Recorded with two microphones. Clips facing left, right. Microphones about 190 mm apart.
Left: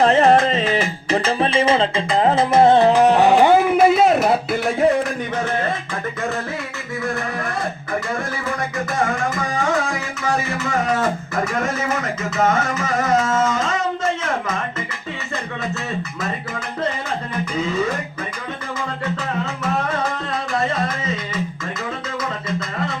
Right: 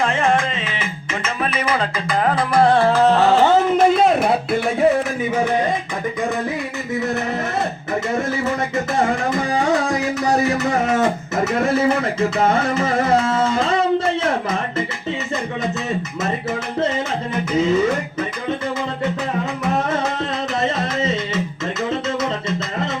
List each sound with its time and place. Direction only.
0.0 s music: 35° left (ahead or behind); by 4.9 s centre (ahead or behind)
5.5 s a sound: 15° right (ahead or behind)
9.0 s music: 35° right (ahead or behind)
11.6 s music: 30° right (ahead or behind)
20.6 s music: 25° right (ahead or behind)